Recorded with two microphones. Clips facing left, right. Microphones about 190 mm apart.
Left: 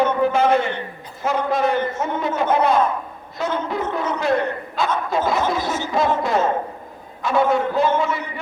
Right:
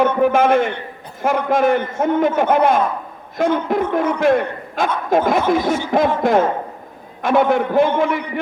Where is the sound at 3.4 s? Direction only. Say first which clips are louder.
Right 6 dB; 10° right (ahead or behind).